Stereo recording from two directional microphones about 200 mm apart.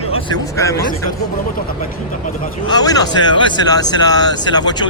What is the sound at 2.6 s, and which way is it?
Speech, 20° left (ahead or behind).